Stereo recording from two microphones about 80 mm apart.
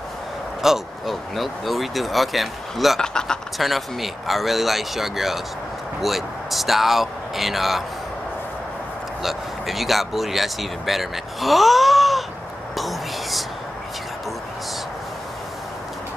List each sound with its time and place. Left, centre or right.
0.6 s speech: centre
9.2 s speech: centre
12.7 s whispering: centre